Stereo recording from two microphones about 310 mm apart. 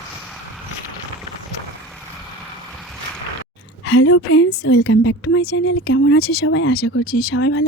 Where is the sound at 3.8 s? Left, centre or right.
Left.